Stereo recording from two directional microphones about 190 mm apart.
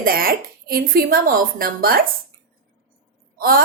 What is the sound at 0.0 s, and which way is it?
A woman's voice, 50° right (ahead or behind).